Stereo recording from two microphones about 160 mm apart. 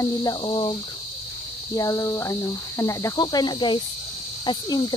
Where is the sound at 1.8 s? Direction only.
20° left (ahead or behind).